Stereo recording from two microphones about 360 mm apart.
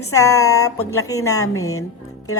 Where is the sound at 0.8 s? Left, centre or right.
Left.